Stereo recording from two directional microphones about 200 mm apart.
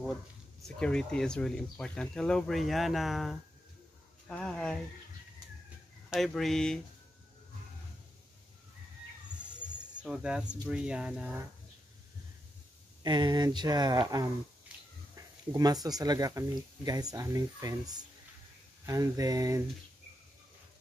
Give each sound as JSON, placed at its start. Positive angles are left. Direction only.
{"t": 0.7, "sound": "speech", "side_deg": 5}
{"t": 6.0, "sound": "speech", "side_deg": 0}
{"t": 10.0, "sound": "speech", "side_deg": -5}
{"t": 13.0, "sound": "speech", "side_deg": -20}
{"t": 14.7, "sound": "finger snapping", "side_deg": -5}
{"t": 15.1, "sound": "speech", "side_deg": -20}
{"t": 18.9, "sound": "a sound", "side_deg": -15}